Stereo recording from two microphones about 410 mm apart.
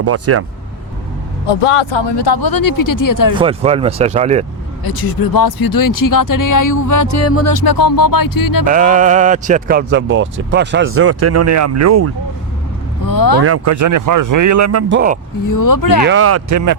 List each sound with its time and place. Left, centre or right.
0.0 s speech: right
1.9 s speech: left
3.3 s speech: centre
4.8 s speech: left
7.5 s speech: left
8.6 s speech: centre; by 12.1 s right
13.1 s speech: left
13.4 s speech: right
15.4 s speech: left
16.0 s speech: right